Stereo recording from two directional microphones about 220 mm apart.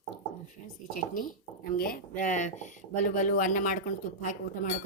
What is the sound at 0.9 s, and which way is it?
Speech, 40° left (ahead or behind).